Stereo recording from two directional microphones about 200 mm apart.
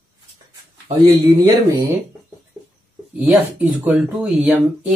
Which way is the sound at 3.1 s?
10° right (ahead or behind).